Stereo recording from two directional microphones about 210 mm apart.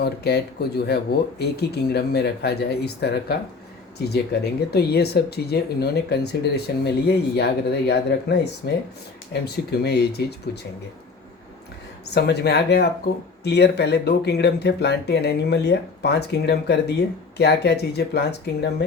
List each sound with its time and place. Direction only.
0.0 s speech: 50° left (ahead or behind)
12.1 s speech: 50° left (ahead or behind)